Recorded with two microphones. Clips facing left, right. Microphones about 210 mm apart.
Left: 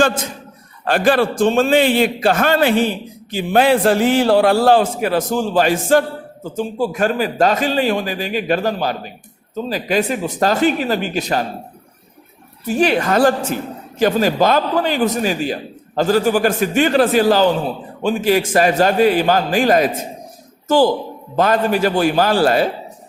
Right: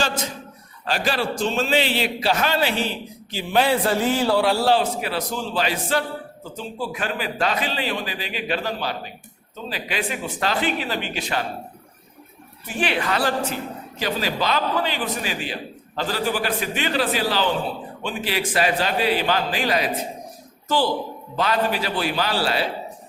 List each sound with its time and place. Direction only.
0.9 s a man's voice: 55° left (ahead or behind)
3.8 s a man's voice: 75° left (ahead or behind); by 11.4 s 40° left (ahead or behind)
12.6 s a man's voice: 40° left (ahead or behind)